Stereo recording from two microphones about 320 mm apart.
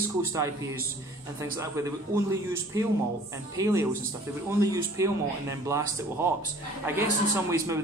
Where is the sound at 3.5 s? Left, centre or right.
Centre.